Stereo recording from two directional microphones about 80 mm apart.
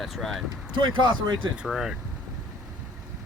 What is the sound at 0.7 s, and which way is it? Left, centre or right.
Speech, right.